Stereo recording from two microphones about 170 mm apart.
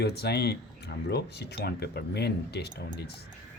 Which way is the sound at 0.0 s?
70° left (ahead or behind).